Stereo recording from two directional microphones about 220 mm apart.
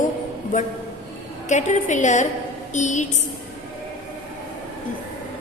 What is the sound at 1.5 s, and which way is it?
A woman's voice, 35° left (ahead or behind).